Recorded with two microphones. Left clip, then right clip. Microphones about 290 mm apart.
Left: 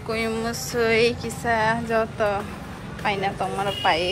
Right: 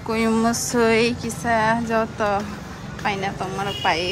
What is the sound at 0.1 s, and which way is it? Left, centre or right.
Speech, centre.